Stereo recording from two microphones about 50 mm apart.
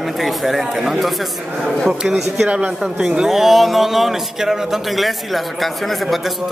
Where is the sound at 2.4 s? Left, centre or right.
Right.